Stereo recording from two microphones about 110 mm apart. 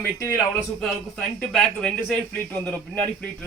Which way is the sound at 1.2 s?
5° left (ahead or behind).